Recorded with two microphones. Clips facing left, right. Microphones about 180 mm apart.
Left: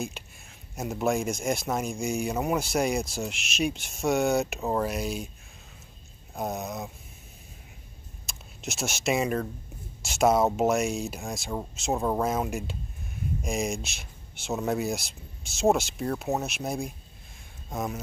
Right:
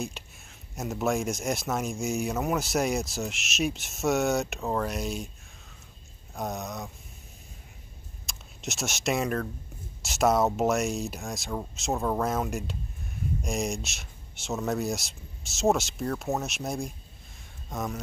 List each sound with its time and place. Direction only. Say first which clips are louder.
0.0 s speech: left 1 dB; centre (ahead or behind)
4.6 s speech: left 2 dB; 15° left (ahead or behind)
4.8 s speech: left 1 dB; centre (ahead or behind)
6.3 s speech: left 2 dB; 5° left (ahead or behind)
8.3 s speech: even; centre (ahead or behind)
11.9 s speech: left 1 dB; 15° left (ahead or behind)
12.2 s speech: left 1 dB; centre (ahead or behind)